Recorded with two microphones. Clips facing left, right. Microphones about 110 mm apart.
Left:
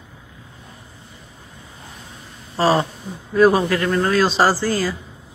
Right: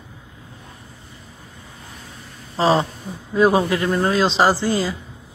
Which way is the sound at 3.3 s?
20° right (ahead or behind).